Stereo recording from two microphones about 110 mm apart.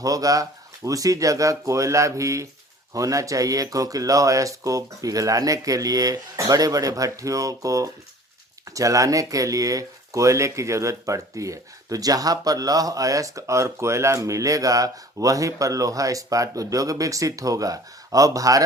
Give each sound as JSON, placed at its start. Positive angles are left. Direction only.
{"t": 0.0, "sound": "speech", "side_deg": -30}